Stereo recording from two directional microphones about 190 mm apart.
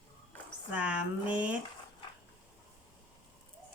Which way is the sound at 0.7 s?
5° right (ahead or behind).